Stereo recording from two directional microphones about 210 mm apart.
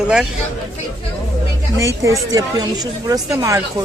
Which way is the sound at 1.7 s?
15° right (ahead or behind).